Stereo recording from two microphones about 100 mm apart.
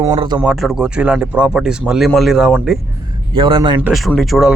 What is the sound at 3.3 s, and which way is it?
Speech, 60° right (ahead or behind).